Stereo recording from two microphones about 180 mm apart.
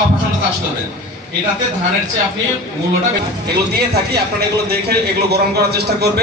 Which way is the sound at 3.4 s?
60° right (ahead or behind).